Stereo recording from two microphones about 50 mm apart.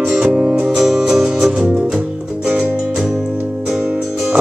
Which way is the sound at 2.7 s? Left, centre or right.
Centre.